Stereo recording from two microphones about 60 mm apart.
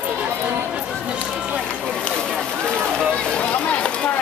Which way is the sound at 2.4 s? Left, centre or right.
Centre.